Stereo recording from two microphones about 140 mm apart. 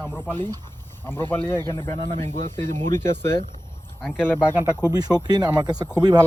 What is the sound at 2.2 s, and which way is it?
Speech, 65° right (ahead or behind).